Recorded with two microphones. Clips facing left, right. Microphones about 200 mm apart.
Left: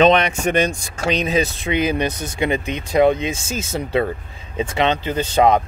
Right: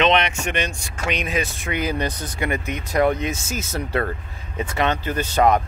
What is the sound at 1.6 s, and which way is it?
Speech, 20° left (ahead or behind).